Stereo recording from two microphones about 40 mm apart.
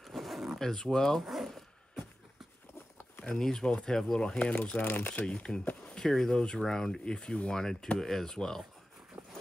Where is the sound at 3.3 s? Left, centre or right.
Centre.